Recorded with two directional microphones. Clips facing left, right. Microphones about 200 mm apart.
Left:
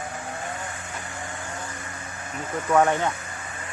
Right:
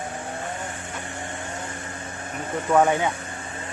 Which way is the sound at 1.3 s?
25° right (ahead or behind).